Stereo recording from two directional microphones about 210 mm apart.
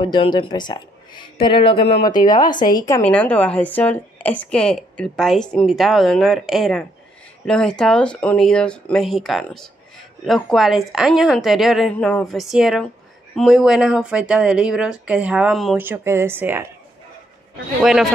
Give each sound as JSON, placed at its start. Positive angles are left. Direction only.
{"t": 0.0, "sound": "speech", "side_deg": 20}
{"t": 2.5, "sound": "a woman's voice", "side_deg": 40}
{"t": 2.9, "sound": "a woman's voice", "side_deg": 5}